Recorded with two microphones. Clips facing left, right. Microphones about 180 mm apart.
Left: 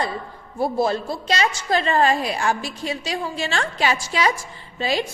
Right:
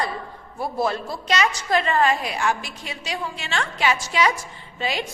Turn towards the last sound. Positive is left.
turn(degrees=35)  # may be behind; listen again after turning